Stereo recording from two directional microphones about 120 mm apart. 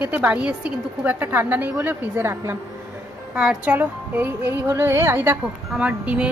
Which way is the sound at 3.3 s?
10° right (ahead or behind).